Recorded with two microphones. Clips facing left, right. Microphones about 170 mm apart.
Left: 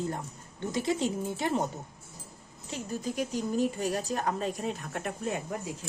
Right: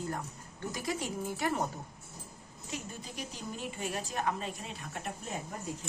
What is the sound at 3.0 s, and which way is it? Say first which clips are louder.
A woman's voice: left 11 dB; 45° left (ahead or behind).